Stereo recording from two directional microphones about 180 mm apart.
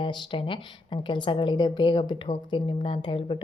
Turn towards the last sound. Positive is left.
turn(degrees=30)  # may be behind; listen again after turning